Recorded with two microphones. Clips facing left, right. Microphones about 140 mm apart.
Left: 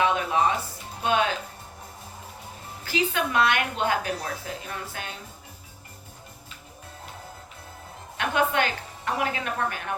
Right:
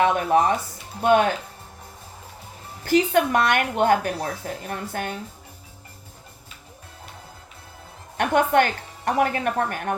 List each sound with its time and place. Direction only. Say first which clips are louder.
0.0 s music: right 4 dB; 50° right (ahead or behind)
1.0 s a woman's voice: right 6 dB; 50° right (ahead or behind)
2.8 s a woman's voice: right 8 dB; 50° right (ahead or behind)
8.2 s a woman's voice: right 6 dB; 45° right (ahead or behind)